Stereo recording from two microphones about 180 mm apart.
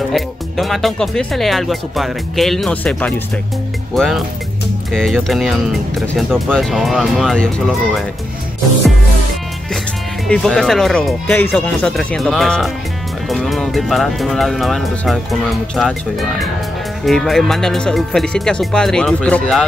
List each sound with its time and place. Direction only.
0.1 s speech: centre (ahead or behind)
10.2 s speech: 5° left (ahead or behind)